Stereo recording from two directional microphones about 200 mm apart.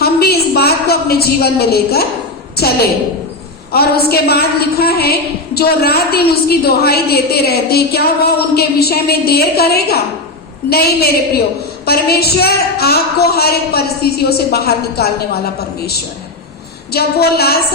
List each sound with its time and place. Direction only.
0.0 s a sound: 50° left (ahead or behind)
2.6 s a woman's voice: 50° left (ahead or behind)
16.9 s a woman's voice: 50° left (ahead or behind)